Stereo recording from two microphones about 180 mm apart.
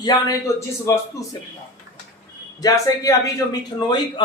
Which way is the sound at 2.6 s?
20° left (ahead or behind).